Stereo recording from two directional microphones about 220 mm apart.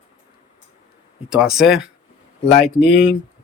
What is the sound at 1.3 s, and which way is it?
Speech, 5° right (ahead or behind).